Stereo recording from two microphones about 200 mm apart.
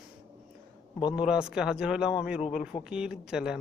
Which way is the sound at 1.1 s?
5° right (ahead or behind).